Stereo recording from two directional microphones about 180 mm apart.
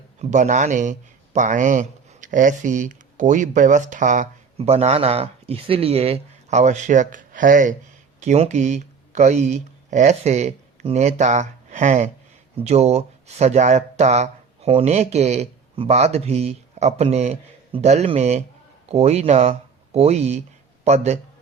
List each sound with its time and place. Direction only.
0.2 s a man's voice: 40° right (ahead or behind)